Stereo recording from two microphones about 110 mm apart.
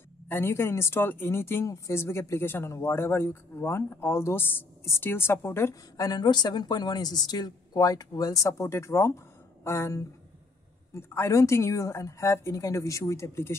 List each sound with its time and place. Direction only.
0.3 s speech: 20° left (ahead or behind)